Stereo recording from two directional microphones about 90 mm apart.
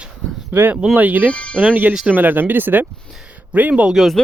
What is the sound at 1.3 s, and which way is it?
Speech, 10° left (ahead or behind).